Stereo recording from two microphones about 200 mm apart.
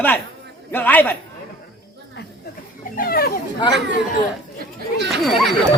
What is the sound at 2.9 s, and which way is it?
Children playing, 45° left (ahead or behind).